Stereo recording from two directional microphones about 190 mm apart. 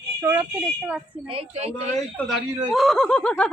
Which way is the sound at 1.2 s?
30° right (ahead or behind).